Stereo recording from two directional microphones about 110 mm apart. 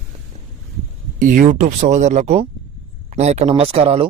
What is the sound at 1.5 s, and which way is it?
Speech, 90° right.